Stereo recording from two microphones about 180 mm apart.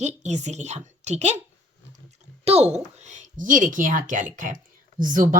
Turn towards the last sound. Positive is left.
turn(degrees=-45)  # may be behind; listen again after turning